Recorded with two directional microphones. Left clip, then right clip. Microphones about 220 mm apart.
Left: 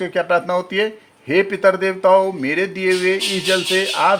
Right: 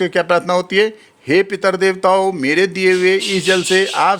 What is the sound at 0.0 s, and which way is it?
A man's voice, 50° right (ahead or behind).